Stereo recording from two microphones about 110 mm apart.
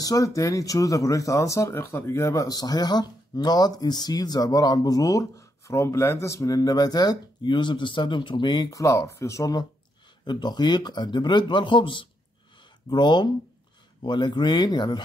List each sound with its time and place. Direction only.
0.0 s a man's voice: 30° left (ahead or behind)